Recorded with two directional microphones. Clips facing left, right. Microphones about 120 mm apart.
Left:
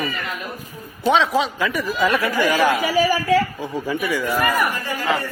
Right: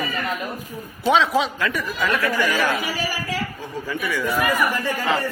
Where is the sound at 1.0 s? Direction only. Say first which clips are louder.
Left 1 dB; centre (ahead or behind).